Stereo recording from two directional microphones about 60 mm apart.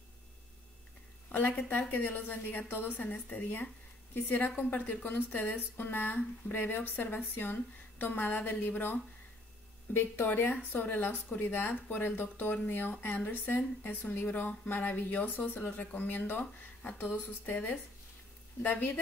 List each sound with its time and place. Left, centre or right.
1.3 s speech: left
9.9 s speech: left